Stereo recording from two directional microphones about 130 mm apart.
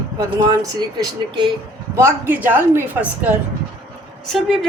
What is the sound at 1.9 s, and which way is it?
A woman's voice, 20° right (ahead or behind).